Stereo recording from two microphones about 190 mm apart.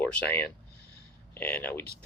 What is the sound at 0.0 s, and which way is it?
Speech, 10° left (ahead or behind).